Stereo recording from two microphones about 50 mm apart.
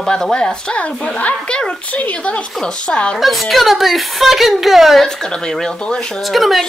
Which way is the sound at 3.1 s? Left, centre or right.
Centre.